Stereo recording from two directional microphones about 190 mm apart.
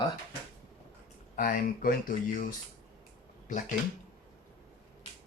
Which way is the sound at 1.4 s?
45° left (ahead or behind).